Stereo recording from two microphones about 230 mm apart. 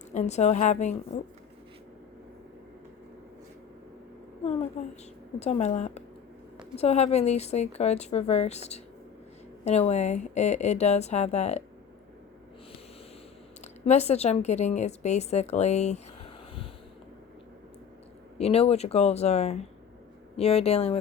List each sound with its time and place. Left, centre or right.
0.1 s a woman's voice: left
4.8 s speech: left
13.8 s a woman's voice: left
18.3 s speech: left